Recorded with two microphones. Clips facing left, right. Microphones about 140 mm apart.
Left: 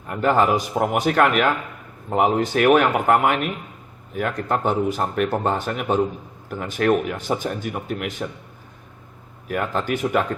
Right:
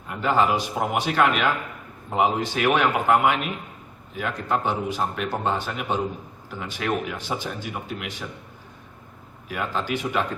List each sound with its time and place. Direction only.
0.1 s speech: 50° left (ahead or behind)
9.5 s speech: 50° left (ahead or behind)